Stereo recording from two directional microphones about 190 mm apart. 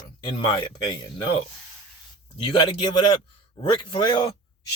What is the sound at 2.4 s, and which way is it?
Speech, 25° left (ahead or behind).